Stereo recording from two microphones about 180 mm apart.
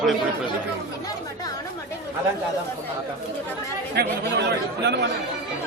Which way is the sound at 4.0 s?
65° right (ahead or behind).